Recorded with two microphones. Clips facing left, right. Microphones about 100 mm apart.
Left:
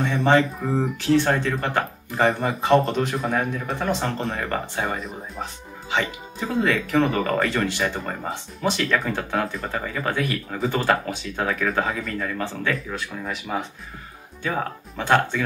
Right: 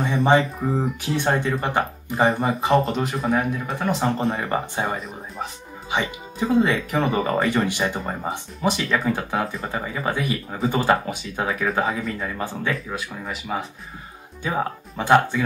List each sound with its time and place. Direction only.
0.0 s speech: 10° right (ahead or behind)
1.0 s speech: 15° right (ahead or behind)
2.0 s speech: 5° right (ahead or behind)
4.9 s speech: centre (ahead or behind)
6.6 s speech: 15° right (ahead or behind)
7.0 s speech: 5° right (ahead or behind)
7.5 s speech: 15° right (ahead or behind)